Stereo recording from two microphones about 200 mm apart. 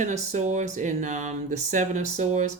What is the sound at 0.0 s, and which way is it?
Speech, 35° right (ahead or behind).